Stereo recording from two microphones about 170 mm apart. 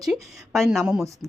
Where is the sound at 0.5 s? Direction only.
Centre (ahead or behind).